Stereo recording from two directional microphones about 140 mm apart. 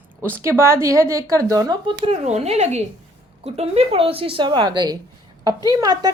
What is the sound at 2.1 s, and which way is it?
Speech, 50° right (ahead or behind).